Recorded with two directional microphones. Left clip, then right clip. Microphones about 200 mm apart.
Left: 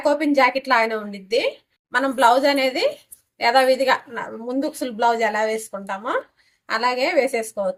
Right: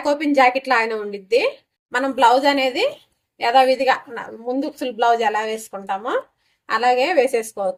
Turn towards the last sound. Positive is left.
turn(degrees=-20)  # may be behind; listen again after turning